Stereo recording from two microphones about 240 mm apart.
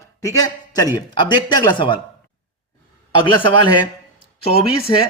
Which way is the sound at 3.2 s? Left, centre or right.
Centre.